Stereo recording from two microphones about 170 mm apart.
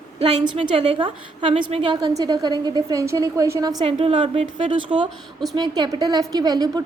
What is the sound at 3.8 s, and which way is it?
A woman's voice, 35° right (ahead or behind).